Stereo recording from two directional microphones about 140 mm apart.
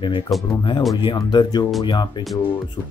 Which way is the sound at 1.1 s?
30° left (ahead or behind).